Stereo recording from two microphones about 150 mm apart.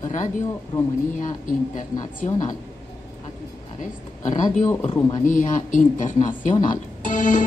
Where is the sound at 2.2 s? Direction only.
55° left (ahead or behind).